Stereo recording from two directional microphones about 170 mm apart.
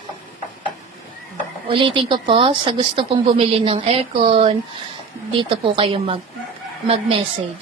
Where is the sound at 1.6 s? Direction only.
30° right (ahead or behind).